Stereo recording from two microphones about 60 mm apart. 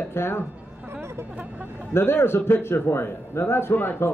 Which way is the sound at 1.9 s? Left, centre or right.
Left.